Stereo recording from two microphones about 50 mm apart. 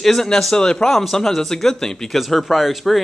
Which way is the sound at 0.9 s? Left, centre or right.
Centre.